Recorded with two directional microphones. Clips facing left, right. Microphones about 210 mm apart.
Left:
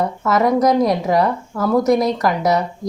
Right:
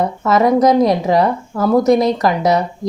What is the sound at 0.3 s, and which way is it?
Speech, 25° right (ahead or behind).